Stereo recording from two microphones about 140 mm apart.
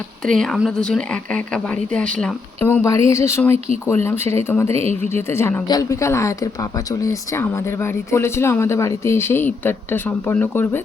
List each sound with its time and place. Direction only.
0.2 s a woman's voice: 5° left (ahead or behind)
2.6 s speech: 20° left (ahead or behind)
4.7 s speech: 45° right (ahead or behind)
5.0 s speech: 20° left (ahead or behind)